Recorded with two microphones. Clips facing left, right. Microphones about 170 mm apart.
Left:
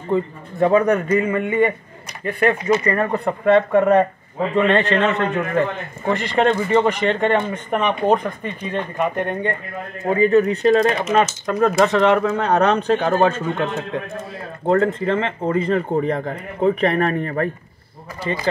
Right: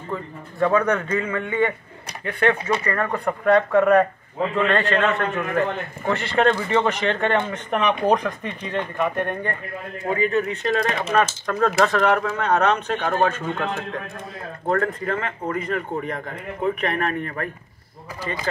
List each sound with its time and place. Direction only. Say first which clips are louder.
0.1 s a man's voice: left 10 dB; 20° left (ahead or behind); by 2.8 s centre (ahead or behind)
2.8 s a man's voice: left 4 dB; 20° left (ahead or behind)
10.0 s speech: left 7 dB; 35° left (ahead or behind)
11.4 s speech: left 3 dB; 20° left (ahead or behind)
14.7 s speech: left 5 dB; 25° left (ahead or behind)